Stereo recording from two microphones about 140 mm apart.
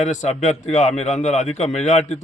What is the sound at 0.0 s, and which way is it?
A man's voice, 55° left (ahead or behind).